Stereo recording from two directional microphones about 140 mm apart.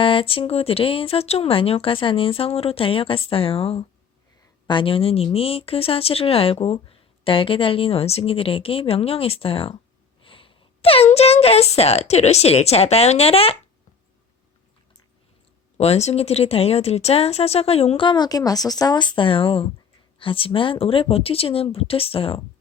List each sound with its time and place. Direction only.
0.0 s speech: 40° left (ahead or behind)
15.8 s speech: 50° left (ahead or behind)